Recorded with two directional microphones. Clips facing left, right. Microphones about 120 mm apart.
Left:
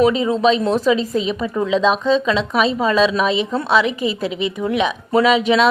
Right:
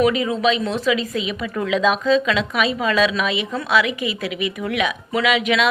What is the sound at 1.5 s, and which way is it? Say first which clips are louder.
Speech: left 2 dB; 25° left (ahead or behind).